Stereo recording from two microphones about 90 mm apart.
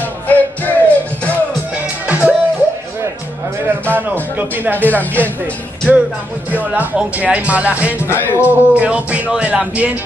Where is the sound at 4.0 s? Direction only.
20° right (ahead or behind).